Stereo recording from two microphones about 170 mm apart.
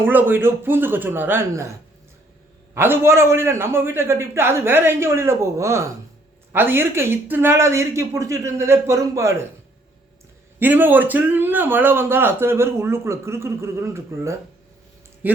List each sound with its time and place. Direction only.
0.0 s speech: 10° right (ahead or behind)
2.7 s speech: 15° right (ahead or behind)
10.6 s speech: 10° right (ahead or behind)